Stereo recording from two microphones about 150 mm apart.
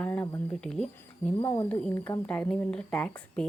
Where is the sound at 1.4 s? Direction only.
30° left (ahead or behind).